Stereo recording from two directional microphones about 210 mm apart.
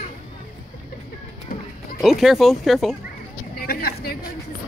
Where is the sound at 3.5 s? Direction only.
45° left (ahead or behind).